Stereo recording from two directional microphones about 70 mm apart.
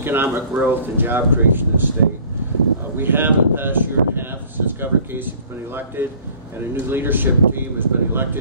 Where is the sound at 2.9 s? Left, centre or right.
Right.